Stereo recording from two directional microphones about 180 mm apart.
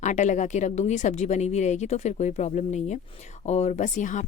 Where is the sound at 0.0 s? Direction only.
45° left (ahead or behind).